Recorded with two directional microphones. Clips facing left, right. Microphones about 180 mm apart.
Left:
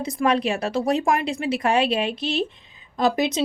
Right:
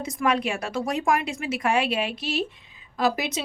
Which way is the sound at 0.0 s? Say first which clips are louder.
Left 3 dB; 35° left (ahead or behind).